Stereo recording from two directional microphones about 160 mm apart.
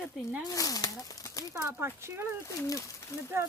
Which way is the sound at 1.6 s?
15° right (ahead or behind).